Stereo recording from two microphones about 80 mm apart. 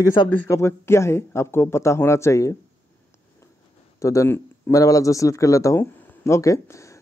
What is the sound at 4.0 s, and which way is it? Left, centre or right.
Speech, left.